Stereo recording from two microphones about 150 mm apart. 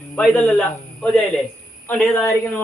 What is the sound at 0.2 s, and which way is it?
A man's voice, 10° left (ahead or behind).